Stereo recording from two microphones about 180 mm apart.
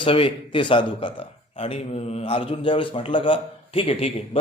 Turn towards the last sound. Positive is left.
turn(degrees=30)  # may be behind; listen again after turning